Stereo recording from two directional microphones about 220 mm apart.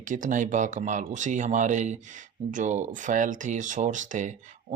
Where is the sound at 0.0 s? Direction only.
35° right (ahead or behind).